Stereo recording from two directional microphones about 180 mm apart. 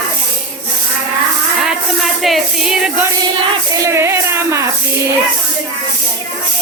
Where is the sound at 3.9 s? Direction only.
15° right (ahead or behind).